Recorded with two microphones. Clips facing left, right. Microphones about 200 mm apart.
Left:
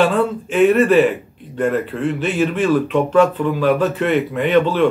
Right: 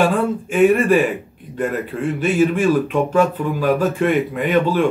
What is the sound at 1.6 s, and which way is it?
Speech, 10° right (ahead or behind).